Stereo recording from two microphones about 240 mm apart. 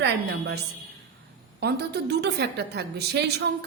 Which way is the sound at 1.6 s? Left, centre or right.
Right.